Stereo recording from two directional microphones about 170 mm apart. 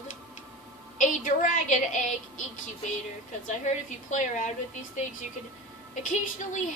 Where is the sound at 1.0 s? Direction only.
50° left (ahead or behind).